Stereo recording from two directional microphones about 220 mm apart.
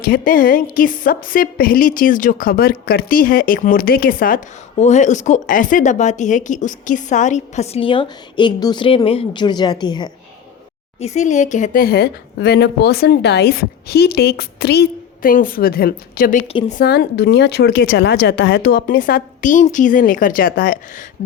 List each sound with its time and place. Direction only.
0.0 s a woman's voice: 40° left (ahead or behind); by 10.1 s 20° left (ahead or behind)
11.0 s a woman's voice: 30° left (ahead or behind)
16.5 s a woman's voice: 30° left (ahead or behind)
16.8 s a woman's voice: 45° left (ahead or behind)